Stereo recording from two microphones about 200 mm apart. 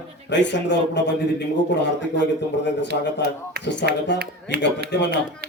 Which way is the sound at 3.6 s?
60° left (ahead or behind).